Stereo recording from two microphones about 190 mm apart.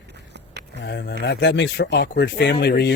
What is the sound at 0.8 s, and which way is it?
Speech, 60° left (ahead or behind).